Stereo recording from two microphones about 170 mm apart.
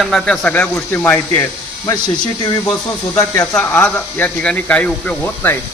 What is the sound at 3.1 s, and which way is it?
A man's voice, 15° left (ahead or behind).